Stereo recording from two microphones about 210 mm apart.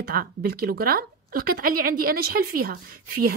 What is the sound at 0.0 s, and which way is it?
A woman's voice, 45° right (ahead or behind).